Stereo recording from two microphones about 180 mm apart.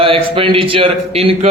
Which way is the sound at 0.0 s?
30° right (ahead or behind).